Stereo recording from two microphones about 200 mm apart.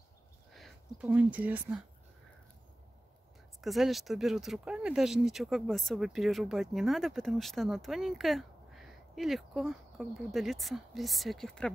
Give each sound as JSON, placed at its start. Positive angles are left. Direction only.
{"t": 0.5, "sound": "speech", "side_deg": 0}
{"t": 3.6, "sound": "speech", "side_deg": 0}